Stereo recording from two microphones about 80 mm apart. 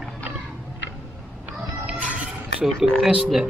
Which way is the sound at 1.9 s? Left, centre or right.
Centre.